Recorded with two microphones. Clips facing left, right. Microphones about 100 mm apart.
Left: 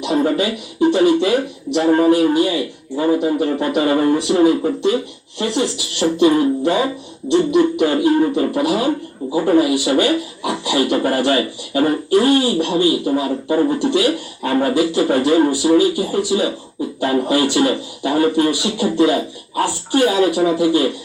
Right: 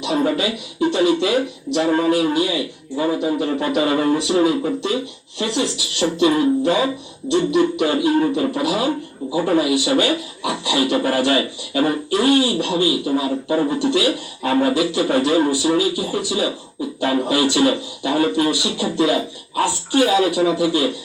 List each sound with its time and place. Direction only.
0.0 s speech: 45° left (ahead or behind)